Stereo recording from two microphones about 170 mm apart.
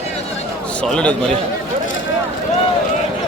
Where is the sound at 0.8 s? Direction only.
5° left (ahead or behind).